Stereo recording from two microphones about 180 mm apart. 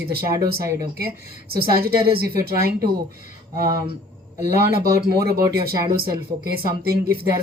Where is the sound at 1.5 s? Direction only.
55° right (ahead or behind).